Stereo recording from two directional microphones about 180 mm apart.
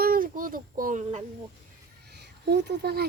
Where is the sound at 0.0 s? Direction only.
50° right (ahead or behind).